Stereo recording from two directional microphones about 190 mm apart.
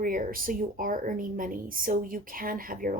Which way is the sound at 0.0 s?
45° right (ahead or behind).